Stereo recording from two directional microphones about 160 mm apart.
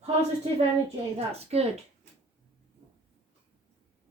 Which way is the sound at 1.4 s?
40° right (ahead or behind).